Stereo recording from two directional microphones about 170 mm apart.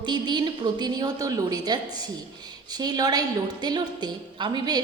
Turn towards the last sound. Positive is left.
turn(degrees=-25)  # may be behind; listen again after turning